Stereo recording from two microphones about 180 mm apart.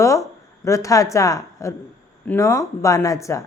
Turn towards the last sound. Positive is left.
turn(degrees=15)  # may be behind; listen again after turning